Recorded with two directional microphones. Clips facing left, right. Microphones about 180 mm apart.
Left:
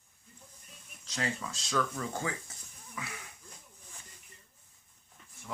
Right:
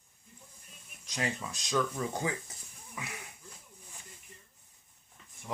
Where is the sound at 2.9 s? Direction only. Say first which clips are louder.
Even; 20° right (ahead or behind).